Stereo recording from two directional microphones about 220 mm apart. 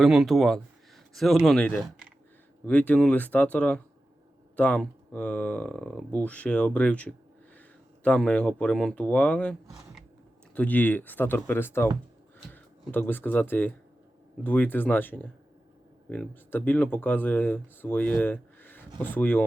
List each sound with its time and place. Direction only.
0.0 s speech: centre (ahead or behind)